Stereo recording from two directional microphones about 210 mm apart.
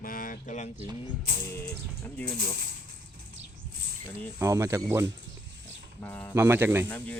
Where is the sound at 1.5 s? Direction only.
10° left (ahead or behind).